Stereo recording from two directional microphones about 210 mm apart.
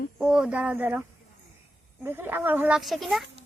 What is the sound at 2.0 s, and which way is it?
Speech, 10° right (ahead or behind).